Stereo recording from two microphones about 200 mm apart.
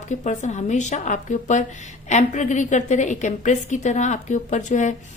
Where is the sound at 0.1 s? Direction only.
35° left (ahead or behind).